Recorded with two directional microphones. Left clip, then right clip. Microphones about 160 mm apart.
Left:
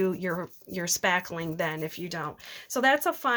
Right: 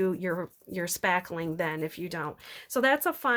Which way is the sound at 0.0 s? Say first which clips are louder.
Even; 30° right (ahead or behind).